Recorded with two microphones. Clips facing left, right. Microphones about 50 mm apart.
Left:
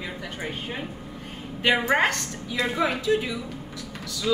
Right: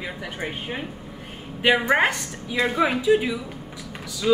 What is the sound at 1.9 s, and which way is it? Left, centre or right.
A woman's voice, centre.